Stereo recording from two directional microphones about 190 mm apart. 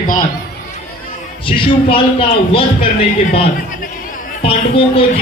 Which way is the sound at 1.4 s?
25° left (ahead or behind).